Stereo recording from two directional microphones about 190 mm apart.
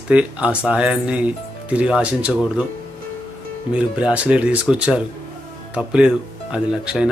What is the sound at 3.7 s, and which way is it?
Speech, 5° right (ahead or behind).